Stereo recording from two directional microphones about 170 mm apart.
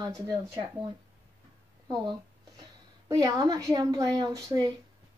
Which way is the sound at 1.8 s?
20° right (ahead or behind).